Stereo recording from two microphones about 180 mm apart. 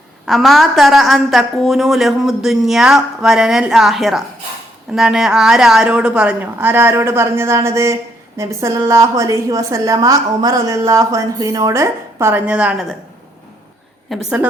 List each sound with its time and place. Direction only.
0.3 s a woman's voice: centre (ahead or behind)
14.1 s speech: 5° right (ahead or behind)